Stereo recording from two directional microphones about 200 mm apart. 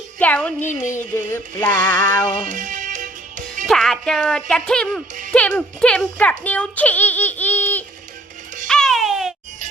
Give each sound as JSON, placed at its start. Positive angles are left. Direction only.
{"t": 0.2, "sound": "a child's voice", "side_deg": 5}
{"t": 2.4, "sound": "music", "side_deg": -40}
{"t": 3.7, "sound": "a child's voice", "side_deg": 0}
{"t": 7.3, "sound": "a sound", "side_deg": 10}
{"t": 8.6, "sound": "music", "side_deg": 0}